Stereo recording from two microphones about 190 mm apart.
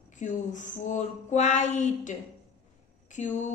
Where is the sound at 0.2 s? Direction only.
40° left (ahead or behind).